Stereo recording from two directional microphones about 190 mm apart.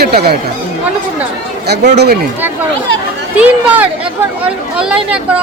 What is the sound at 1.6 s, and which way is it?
Speech, 60° right (ahead or behind).